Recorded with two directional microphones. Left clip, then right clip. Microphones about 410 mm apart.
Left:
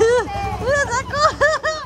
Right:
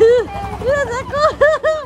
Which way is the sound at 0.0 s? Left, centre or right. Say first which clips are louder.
Right 4 dB; centre.